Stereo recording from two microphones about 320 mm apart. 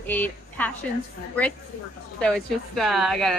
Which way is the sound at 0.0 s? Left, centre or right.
Centre.